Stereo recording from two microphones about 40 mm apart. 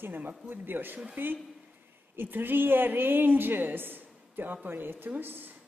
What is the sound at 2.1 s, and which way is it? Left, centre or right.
A woman's voice, right.